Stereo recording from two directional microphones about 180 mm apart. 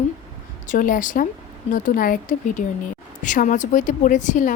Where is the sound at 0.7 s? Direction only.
50° left (ahead or behind).